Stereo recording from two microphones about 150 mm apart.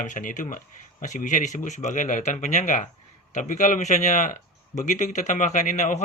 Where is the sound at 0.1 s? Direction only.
60° left (ahead or behind).